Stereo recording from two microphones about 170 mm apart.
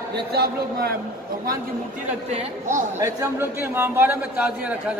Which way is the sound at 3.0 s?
15° right (ahead or behind).